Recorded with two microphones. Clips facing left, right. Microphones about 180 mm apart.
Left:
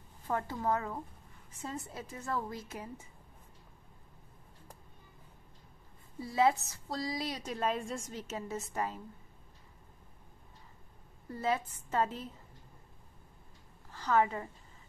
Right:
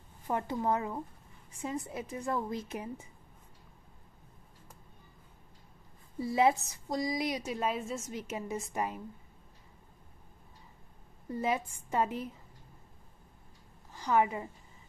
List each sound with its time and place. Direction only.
0.3 s a woman's voice: 20° right (ahead or behind)
6.2 s a woman's voice: 15° right (ahead or behind)
11.2 s a woman's voice: 15° right (ahead or behind)
13.9 s a woman's voice: 15° right (ahead or behind)